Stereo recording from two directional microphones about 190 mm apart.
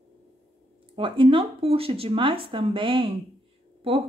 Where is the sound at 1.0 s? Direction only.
30° right (ahead or behind).